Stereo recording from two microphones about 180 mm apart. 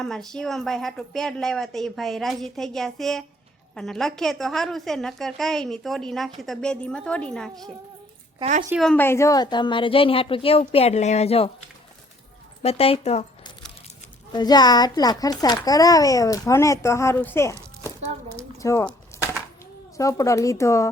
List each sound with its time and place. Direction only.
0.0 s a woman's voice: 5° left (ahead or behind)
8.7 s a child's voice: 5° left (ahead or behind); by 11.5 s 35° left (ahead or behind)
12.6 s speech: 35° left (ahead or behind)
14.3 s a child's voice: 20° left (ahead or behind)
20.0 s speech: 20° left (ahead or behind)